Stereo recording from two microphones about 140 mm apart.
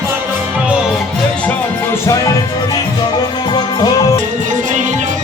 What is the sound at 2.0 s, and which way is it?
Music, 20° left (ahead or behind).